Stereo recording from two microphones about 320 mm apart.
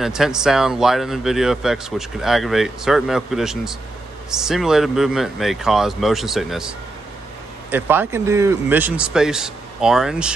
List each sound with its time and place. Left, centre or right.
0.0 s speech: centre
7.7 s speech: centre